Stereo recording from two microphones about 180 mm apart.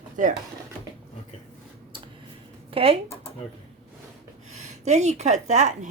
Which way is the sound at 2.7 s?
30° right (ahead or behind).